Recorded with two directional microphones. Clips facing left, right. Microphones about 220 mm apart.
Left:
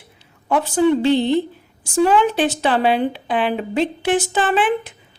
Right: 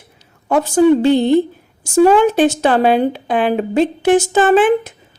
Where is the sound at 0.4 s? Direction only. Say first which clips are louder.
Right 5 dB; 45° right (ahead or behind).